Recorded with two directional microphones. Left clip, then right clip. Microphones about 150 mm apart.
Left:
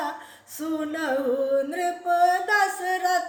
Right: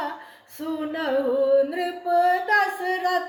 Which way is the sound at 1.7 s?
30° left (ahead or behind).